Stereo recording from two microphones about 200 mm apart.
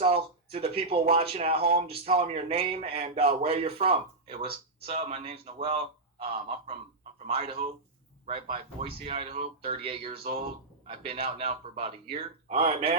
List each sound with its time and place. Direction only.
0.0 s a man's voice: 30° right (ahead or behind)
7.3 s speech: 30° right (ahead or behind)